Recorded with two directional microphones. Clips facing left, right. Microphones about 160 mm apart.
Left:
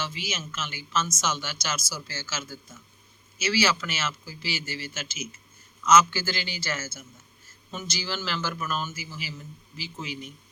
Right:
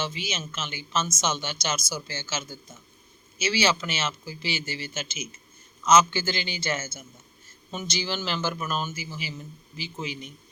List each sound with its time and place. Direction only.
0.0 s speech: 20° right (ahead or behind)